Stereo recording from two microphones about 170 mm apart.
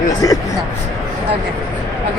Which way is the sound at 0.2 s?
20° left (ahead or behind).